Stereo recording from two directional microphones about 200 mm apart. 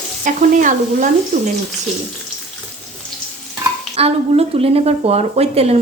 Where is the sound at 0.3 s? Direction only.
40° right (ahead or behind).